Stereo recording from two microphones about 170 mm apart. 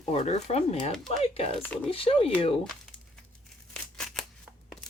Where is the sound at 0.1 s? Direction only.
40° left (ahead or behind).